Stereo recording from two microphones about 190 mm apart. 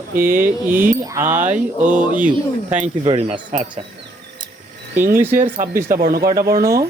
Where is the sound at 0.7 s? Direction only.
10° right (ahead or behind).